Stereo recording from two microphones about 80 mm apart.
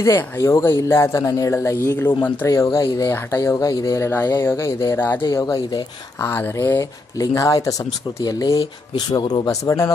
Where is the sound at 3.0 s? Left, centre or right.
Left.